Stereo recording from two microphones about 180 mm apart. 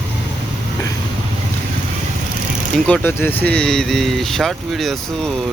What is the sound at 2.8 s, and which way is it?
Speech, 10° left (ahead or behind).